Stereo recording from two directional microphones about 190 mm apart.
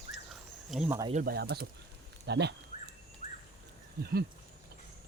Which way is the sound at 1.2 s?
55° right (ahead or behind).